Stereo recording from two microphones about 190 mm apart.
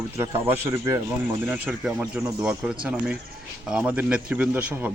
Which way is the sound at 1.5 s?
5° right (ahead or behind).